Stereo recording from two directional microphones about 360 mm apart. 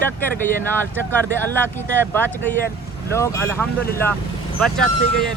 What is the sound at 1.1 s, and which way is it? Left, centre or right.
Speech, centre.